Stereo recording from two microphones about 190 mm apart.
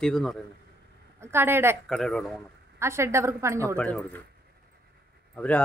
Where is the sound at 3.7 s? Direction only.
5° left (ahead or behind).